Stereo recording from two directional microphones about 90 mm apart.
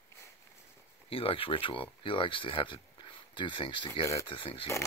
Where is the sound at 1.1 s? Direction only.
90° left.